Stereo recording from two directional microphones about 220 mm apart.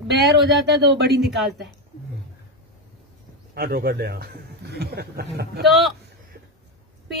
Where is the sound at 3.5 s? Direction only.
45° right (ahead or behind).